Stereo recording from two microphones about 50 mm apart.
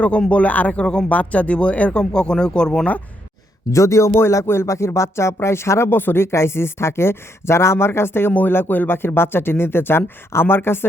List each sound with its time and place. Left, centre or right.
0.3 s speech: left
1.1 s speech: left
3.7 s speech: left
4.1 s speech: left
5.9 s a woman's voice: left
8.3 s speech: left